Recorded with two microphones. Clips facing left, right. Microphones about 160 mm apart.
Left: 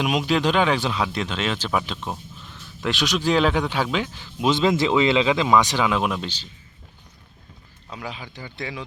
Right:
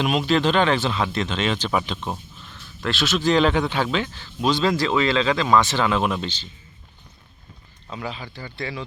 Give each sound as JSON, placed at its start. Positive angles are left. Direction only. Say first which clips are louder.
{"t": 0.0, "sound": "speech", "louder": "right 1 dB", "side_deg": 10}
{"t": 2.8, "sound": "speech", "louder": "right 1 dB", "side_deg": 15}
{"t": 7.9, "sound": "speech", "louder": "right 3 dB", "side_deg": 10}